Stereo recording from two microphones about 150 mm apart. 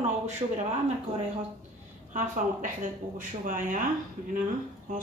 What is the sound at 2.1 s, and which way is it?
Speech, 60° right (ahead or behind).